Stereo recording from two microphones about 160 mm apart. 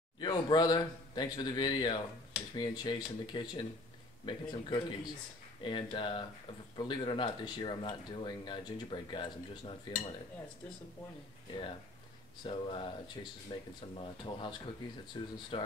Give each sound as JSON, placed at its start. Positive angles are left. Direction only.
{"t": 0.2, "sound": "speech", "side_deg": 25}
{"t": 12.4, "sound": "speech", "side_deg": 30}